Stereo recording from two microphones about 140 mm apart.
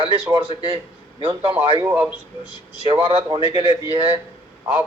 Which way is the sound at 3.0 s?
35° right (ahead or behind).